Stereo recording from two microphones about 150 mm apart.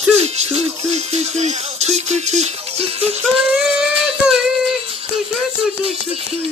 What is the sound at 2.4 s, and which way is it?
Music, 45° right (ahead or behind).